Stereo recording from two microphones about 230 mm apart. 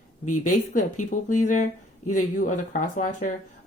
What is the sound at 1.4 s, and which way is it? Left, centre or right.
Speech, left.